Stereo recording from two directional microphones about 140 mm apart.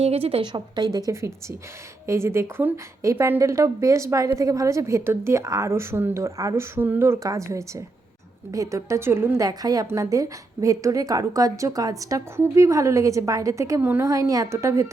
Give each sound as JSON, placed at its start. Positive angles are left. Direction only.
{"t": 0.0, "sound": "a woman's voice", "side_deg": -45}
{"t": 9.5, "sound": "a woman's voice", "side_deg": -25}